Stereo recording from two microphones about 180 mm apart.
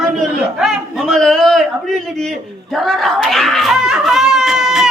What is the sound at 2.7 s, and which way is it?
Speech, centre (ahead or behind).